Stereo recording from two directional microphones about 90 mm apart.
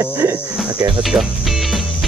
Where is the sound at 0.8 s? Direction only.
65° right (ahead or behind).